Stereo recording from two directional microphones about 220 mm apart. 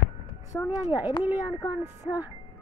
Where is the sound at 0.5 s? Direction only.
15° left (ahead or behind).